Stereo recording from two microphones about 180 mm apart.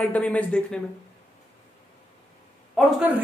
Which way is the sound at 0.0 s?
5° left (ahead or behind).